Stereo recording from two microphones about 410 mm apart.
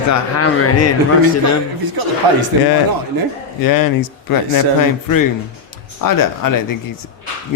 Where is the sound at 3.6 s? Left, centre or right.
Left.